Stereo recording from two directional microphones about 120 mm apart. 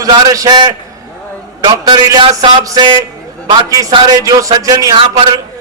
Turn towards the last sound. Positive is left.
turn(degrees=-35)  # may be behind; listen again after turning